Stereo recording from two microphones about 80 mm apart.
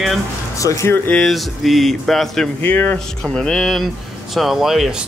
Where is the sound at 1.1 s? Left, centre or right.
Centre.